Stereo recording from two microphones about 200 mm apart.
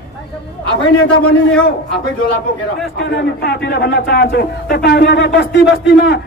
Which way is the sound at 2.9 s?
55° left (ahead or behind).